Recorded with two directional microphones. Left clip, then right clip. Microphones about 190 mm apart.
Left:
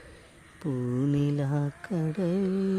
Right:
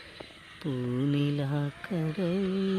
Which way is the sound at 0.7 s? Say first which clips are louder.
Left 1 dB; 5° left (ahead or behind).